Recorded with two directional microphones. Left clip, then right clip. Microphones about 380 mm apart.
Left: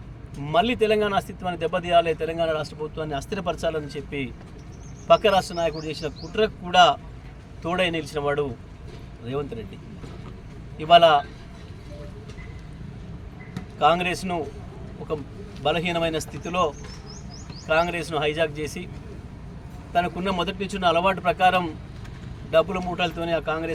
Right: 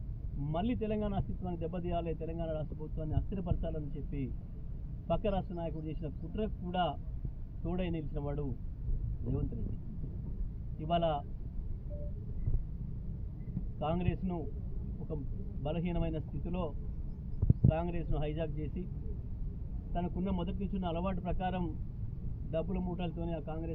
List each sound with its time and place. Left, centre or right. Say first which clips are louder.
0.4 s a man's voice: left 16 dB; left
10.8 s a man's voice: left 18 dB; left
13.7 s a man's voice: left 17 dB; left
15.6 s a man's voice: left 15 dB; left
19.9 s a man's voice: left 15 dB; left